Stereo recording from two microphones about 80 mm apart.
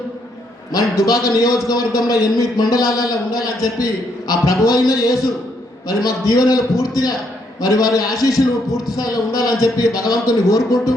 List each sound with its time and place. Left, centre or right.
0.7 s a man's voice: left